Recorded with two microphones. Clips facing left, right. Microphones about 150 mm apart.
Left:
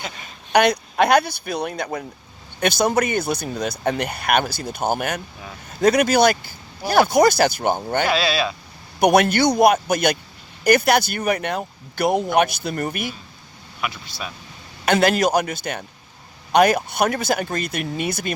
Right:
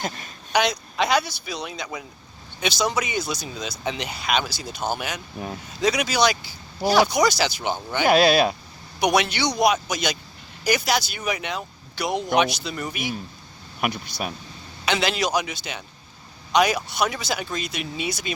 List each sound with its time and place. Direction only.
0.5 s speech: 55° left (ahead or behind)
8.0 s speech: 45° right (ahead or behind)
9.0 s speech: 50° left (ahead or behind)
13.8 s speech: 45° right (ahead or behind)
14.8 s speech: 50° left (ahead or behind)